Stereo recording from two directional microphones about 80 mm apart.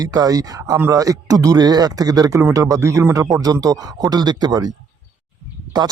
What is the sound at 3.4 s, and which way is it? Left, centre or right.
Speech, right.